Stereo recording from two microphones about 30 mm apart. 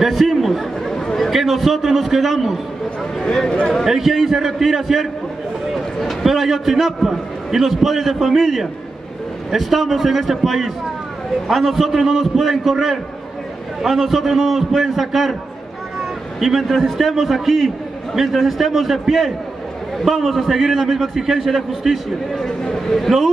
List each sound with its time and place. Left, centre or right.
0.0 s speech: centre
0.8 s chatter: centre
1.3 s a man's voice: centre
3.2 s a sound: centre
3.8 s a man's voice: centre
5.7 s a sound: centre
6.2 s a man's voice: centre
16.3 s a man's voice: centre
22.3 s speech: centre
23.1 s a man's voice: centre